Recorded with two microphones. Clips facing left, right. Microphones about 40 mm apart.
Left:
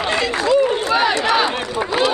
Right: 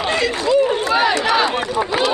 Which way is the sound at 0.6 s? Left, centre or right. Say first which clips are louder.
Even; right.